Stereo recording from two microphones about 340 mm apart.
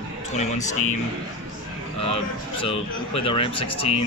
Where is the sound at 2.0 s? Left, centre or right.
Centre.